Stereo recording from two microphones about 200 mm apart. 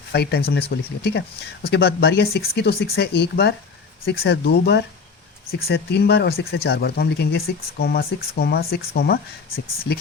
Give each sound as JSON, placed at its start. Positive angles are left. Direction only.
{"t": 0.1, "sound": "speech", "side_deg": 55}